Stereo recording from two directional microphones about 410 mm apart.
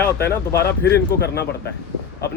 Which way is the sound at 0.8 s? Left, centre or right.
Left.